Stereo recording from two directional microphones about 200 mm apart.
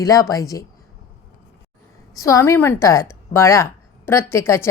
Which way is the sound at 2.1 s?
15° left (ahead or behind).